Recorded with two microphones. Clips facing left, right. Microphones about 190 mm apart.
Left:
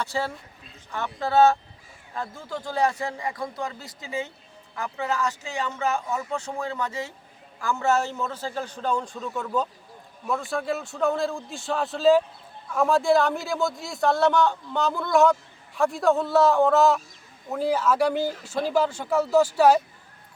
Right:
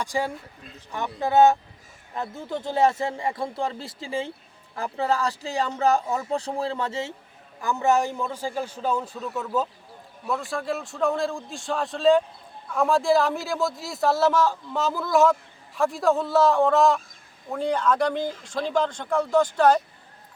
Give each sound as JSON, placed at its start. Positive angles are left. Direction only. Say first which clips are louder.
{"t": 0.0, "sound": "a man's voice", "louder": "right 2 dB", "side_deg": -15}